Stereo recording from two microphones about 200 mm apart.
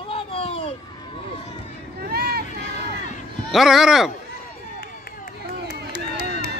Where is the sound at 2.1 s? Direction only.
50° right (ahead or behind).